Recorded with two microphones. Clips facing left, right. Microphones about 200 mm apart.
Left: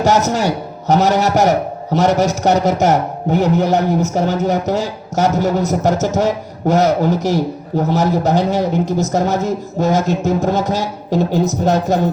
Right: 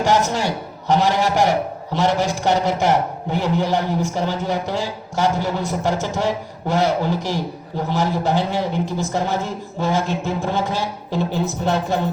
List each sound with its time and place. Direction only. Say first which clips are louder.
0.0 s a man's voice: left 4 dB; 40° left (ahead or behind)